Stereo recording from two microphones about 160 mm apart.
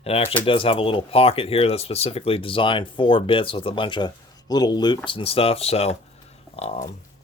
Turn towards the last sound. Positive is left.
turn(degrees=40)  # may be behind; listen again after turning